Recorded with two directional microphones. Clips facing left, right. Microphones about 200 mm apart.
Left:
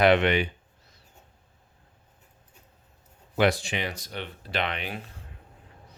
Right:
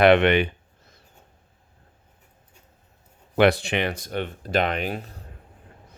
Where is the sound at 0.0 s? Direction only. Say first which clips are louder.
Right 4 dB; 60° right (ahead or behind).